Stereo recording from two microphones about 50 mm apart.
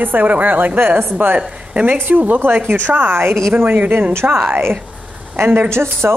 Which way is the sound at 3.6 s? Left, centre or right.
Right.